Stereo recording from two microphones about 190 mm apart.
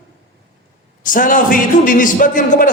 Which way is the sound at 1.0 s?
45° left (ahead or behind).